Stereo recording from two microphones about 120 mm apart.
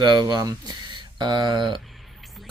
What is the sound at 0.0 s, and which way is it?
Speech, 35° right (ahead or behind).